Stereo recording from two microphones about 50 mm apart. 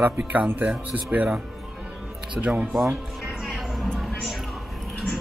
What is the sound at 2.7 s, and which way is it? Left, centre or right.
Speech, centre.